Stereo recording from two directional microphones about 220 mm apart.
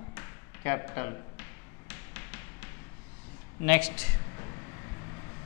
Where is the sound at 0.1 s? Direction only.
15° left (ahead or behind).